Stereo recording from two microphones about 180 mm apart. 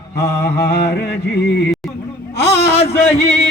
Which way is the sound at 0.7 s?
65° left (ahead or behind).